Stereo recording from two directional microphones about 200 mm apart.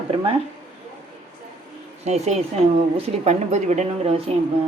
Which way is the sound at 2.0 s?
35° right (ahead or behind).